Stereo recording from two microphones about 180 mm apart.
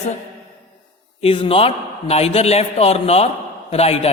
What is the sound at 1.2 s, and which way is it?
Mantra, 30° left (ahead or behind).